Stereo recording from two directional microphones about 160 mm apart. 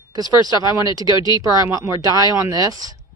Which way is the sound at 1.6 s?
20° right (ahead or behind).